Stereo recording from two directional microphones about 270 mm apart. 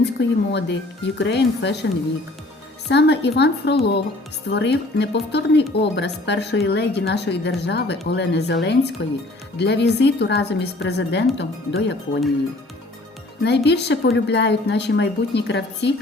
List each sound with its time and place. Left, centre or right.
0.0 s speech: left
2.9 s speech: left
13.4 s speech: left